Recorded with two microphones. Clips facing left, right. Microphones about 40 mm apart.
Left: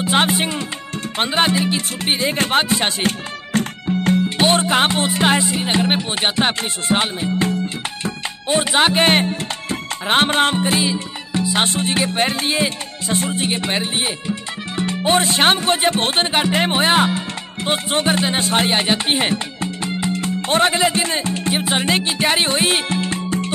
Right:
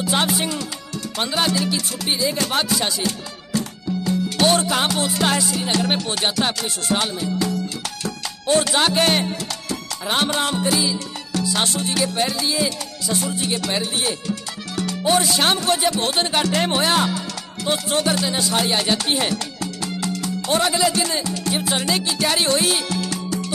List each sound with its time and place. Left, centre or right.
0.0 s music: left
1.1 s speech: left
4.4 s speech: left
14.8 s music: left
17.6 s speech: left